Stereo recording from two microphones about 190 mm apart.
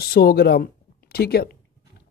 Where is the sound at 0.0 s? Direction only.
55° left (ahead or behind).